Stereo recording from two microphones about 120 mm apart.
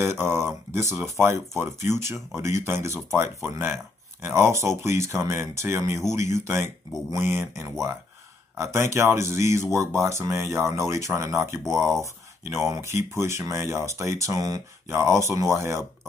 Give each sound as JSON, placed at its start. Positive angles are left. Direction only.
{"t": 0.0, "sound": "speech", "side_deg": -20}